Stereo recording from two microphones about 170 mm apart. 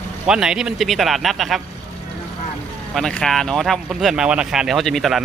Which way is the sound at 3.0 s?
5° left (ahead or behind).